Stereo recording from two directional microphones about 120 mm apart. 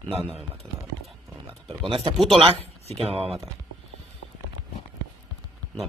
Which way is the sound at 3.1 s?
55° right (ahead or behind).